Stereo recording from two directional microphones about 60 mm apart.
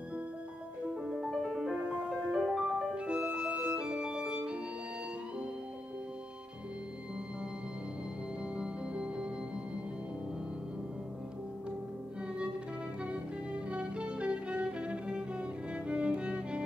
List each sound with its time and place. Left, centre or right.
1.0 s music: centre
1.8 s music: centre
2.3 s music: centre
8.5 s music: centre
13.0 s music: centre